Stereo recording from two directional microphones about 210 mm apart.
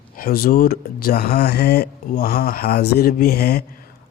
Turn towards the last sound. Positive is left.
turn(degrees=45)  # may be behind; listen again after turning